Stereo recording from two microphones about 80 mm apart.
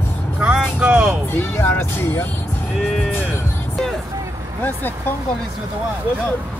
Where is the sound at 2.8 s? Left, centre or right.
Centre.